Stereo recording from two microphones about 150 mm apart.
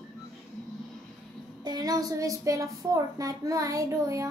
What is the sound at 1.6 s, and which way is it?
A woman's voice, 25° right (ahead or behind).